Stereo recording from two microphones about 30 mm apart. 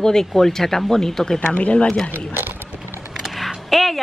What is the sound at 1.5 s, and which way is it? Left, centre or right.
Speech, left.